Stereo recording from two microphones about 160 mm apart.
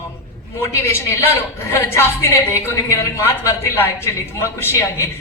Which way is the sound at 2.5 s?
15° left (ahead or behind).